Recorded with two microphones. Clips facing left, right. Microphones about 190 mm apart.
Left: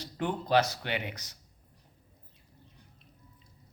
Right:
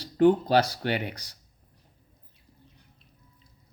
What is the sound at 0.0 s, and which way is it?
Speech, 35° right (ahead or behind).